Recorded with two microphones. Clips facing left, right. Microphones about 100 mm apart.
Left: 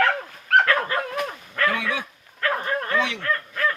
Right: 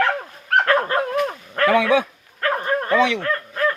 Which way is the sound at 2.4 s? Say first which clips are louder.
Right 4 dB; 25° right (ahead or behind).